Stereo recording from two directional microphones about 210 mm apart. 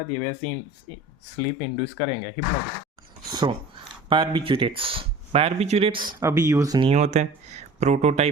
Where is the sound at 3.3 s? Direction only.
20° right (ahead or behind).